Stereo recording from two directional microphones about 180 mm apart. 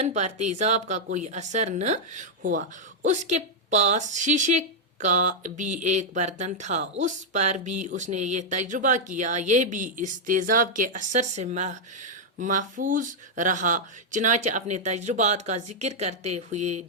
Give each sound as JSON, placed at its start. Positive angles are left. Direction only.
{"t": 0.0, "sound": "a woman's voice", "side_deg": -40}